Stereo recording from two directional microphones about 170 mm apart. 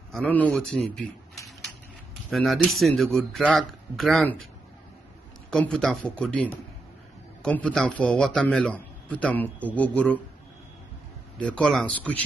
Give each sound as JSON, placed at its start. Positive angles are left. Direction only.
{"t": 0.1, "sound": "speech", "side_deg": 10}
{"t": 2.3, "sound": "speech", "side_deg": 0}
{"t": 5.5, "sound": "a man's voice", "side_deg": 5}
{"t": 11.3, "sound": "a man's voice", "side_deg": 5}